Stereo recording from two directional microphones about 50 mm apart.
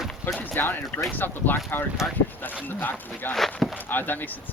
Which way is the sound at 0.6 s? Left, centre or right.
Left.